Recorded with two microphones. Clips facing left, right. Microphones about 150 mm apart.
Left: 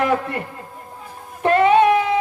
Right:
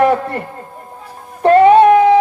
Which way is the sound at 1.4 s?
40° right (ahead or behind).